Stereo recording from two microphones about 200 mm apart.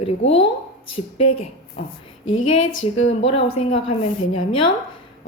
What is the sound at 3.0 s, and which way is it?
Speech, 30° left (ahead or behind).